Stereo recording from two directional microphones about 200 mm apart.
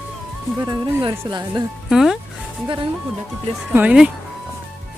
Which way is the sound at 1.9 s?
Centre (ahead or behind).